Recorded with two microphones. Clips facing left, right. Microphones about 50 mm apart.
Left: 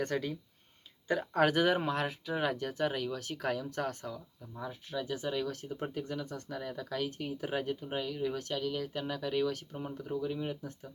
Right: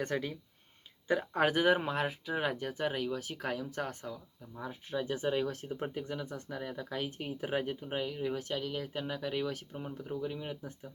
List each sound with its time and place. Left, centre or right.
0.0 s speech: centre